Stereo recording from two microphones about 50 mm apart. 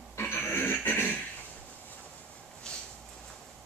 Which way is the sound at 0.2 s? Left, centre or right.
Left.